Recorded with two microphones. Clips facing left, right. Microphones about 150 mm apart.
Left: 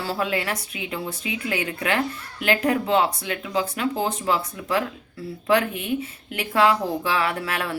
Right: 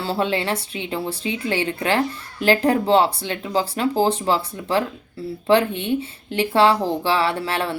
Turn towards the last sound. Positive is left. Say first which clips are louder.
# right 4 dB
turn(degrees=-30)  # may be behind; listen again after turning